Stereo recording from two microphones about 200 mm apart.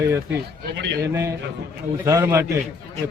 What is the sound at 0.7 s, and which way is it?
Speech, 60° right (ahead or behind).